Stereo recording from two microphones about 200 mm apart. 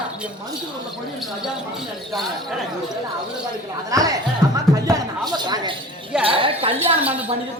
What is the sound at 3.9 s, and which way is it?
Speech, 20° right (ahead or behind).